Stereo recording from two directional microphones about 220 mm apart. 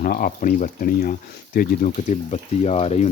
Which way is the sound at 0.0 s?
40° left (ahead or behind).